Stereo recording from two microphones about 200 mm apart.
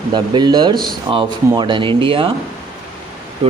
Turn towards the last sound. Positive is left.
turn(degrees=-30)  # may be behind; listen again after turning